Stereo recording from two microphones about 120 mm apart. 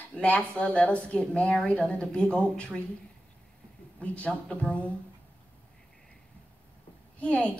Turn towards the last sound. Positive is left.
turn(degrees=10)  # may be behind; listen again after turning